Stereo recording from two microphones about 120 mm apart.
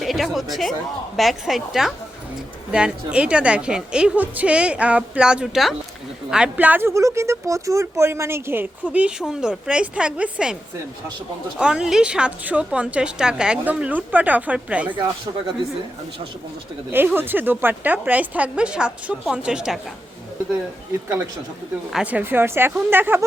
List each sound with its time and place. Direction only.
0.0 s a woman's voice: centre (ahead or behind)
14.9 s speech: 40° right (ahead or behind)
16.9 s speech: 15° right (ahead or behind)
22.0 s a woman's voice: 15° right (ahead or behind)